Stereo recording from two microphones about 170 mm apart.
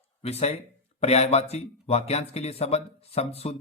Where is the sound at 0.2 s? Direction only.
40° left (ahead or behind).